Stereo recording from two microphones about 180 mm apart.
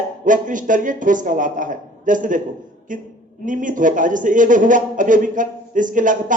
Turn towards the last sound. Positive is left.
turn(degrees=-45)  # may be behind; listen again after turning